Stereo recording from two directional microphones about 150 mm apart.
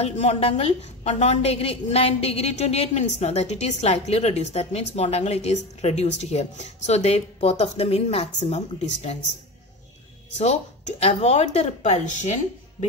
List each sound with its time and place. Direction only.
0.0 s a woman's voice: 45° left (ahead or behind)
10.3 s a woman's voice: 50° left (ahead or behind)